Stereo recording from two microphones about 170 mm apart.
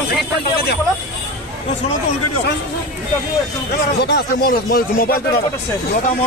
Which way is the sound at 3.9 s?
75° left (ahead or behind).